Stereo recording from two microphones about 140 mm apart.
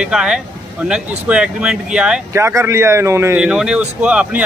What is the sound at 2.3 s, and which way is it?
A man's voice, 20° right (ahead or behind).